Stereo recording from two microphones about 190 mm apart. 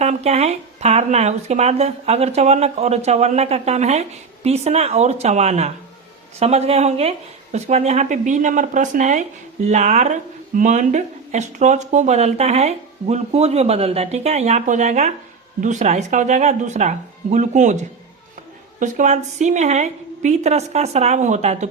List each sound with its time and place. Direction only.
0.0 s speech: 35° right (ahead or behind)